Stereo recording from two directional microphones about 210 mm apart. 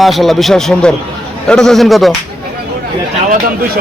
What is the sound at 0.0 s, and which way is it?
Speech, centre (ahead or behind).